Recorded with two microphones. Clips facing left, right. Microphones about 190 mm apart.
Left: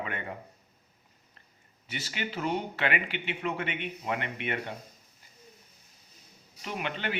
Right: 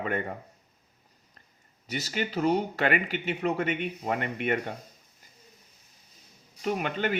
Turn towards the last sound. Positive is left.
turn(degrees=-45)  # may be behind; listen again after turning